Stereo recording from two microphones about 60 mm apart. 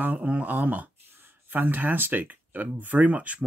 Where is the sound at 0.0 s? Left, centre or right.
Right.